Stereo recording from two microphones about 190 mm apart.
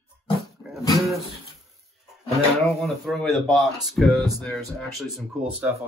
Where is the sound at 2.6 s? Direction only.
Centre (ahead or behind).